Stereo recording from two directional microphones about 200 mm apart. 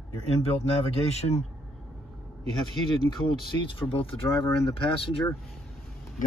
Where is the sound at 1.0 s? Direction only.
30° left (ahead or behind).